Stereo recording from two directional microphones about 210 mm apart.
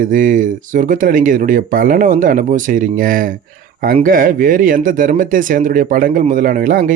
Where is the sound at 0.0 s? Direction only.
40° right (ahead or behind).